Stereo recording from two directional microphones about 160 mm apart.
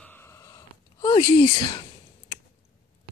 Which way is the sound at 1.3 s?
35° left (ahead or behind).